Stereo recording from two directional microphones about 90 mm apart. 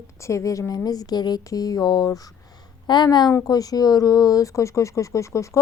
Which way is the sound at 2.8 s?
55° left (ahead or behind).